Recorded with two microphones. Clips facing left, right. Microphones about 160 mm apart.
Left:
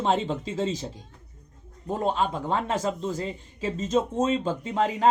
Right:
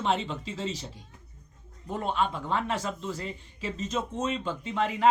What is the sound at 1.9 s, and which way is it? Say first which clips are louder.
A man's voice: left 3 dB; 35° left (ahead or behind).